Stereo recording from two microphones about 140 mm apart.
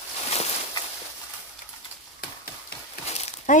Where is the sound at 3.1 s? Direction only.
50° left (ahead or behind).